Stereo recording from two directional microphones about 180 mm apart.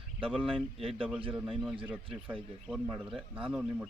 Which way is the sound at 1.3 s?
5° right (ahead or behind).